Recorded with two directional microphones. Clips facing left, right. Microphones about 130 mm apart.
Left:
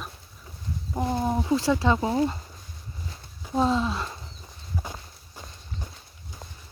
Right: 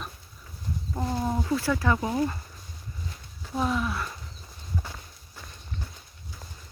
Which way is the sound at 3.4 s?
25° left (ahead or behind).